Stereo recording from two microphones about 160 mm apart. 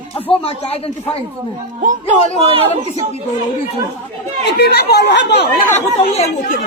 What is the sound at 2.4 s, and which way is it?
Speech, 35° right (ahead or behind).